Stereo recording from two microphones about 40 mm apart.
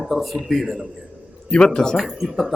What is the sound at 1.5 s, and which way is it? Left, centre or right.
Speech, centre.